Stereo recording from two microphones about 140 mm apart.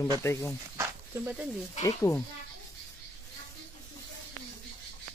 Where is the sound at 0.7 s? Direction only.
15° right (ahead or behind).